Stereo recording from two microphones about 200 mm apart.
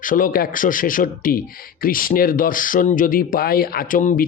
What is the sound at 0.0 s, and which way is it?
Speech, 40° left (ahead or behind).